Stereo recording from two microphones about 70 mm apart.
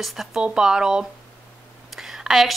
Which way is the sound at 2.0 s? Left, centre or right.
Centre.